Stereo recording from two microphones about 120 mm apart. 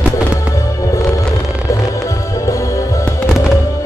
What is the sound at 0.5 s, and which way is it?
Fireworks, 25° left (ahead or behind).